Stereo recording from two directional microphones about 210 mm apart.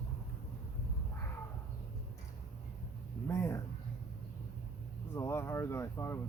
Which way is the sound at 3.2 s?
15° left (ahead or behind).